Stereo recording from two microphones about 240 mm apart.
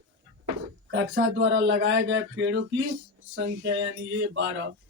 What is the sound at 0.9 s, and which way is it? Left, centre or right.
Speech, right.